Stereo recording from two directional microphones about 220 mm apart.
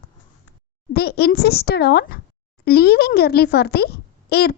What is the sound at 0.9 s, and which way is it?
A child's voice, 45° left (ahead or behind).